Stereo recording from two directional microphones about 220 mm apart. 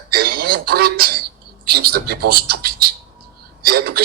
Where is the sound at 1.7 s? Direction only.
45° right (ahead or behind).